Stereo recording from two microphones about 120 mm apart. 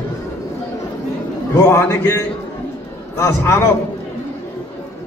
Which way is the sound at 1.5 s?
20° left (ahead or behind).